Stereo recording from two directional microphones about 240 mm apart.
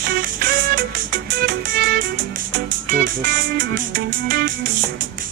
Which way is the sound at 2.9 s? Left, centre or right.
Right.